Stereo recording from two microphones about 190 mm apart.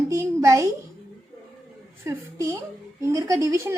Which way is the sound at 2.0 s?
15° right (ahead or behind).